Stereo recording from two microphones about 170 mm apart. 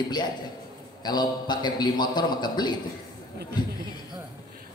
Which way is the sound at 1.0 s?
25° left (ahead or behind).